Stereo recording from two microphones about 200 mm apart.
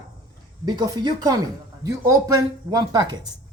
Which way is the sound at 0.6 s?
20° right (ahead or behind).